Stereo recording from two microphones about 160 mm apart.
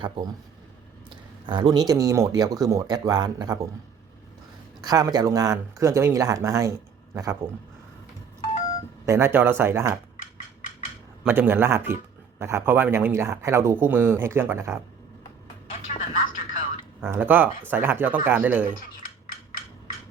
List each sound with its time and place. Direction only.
1.1 s speech: 30° right (ahead or behind)
4.8 s speech: 25° right (ahead or behind)
9.0 s speech: 15° right (ahead or behind)
11.2 s speech: 10° right (ahead or behind)
15.7 s music: 50° left (ahead or behind)
17.1 s speech: 10° right (ahead or behind)